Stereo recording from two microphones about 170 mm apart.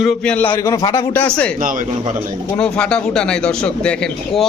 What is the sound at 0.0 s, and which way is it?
Speech, 5° left (ahead or behind).